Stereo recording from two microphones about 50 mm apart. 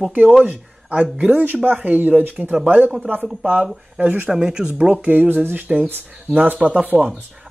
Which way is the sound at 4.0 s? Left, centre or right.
Right.